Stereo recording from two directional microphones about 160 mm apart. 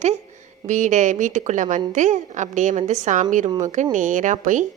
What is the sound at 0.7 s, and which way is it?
A woman's voice, 50° right (ahead or behind).